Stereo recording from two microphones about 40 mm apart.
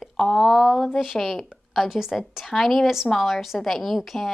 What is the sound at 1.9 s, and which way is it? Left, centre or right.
Speech, centre.